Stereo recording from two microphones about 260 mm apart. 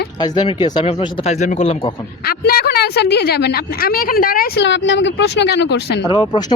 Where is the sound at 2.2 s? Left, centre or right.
Left.